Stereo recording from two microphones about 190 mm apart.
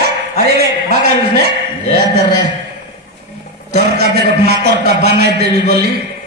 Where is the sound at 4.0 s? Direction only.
55° right (ahead or behind).